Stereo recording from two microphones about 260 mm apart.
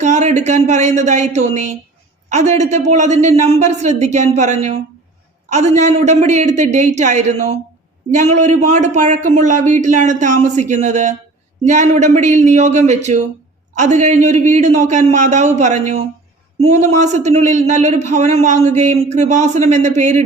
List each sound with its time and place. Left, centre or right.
0.0 s a man's voice: right